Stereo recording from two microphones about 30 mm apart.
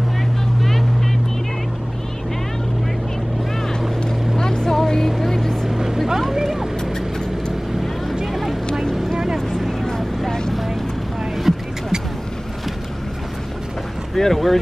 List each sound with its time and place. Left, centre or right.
0.6 s vehicle: centre
4.4 s vehicle: left
5.7 s vehicle: centre
8.3 s vehicle: centre
9.1 s vehicle: centre
9.6 s vehicle: centre
11.5 s music: centre
14.1 s speech: centre